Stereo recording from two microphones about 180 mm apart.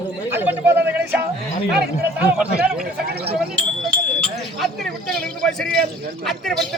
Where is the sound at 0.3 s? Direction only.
10° right (ahead or behind).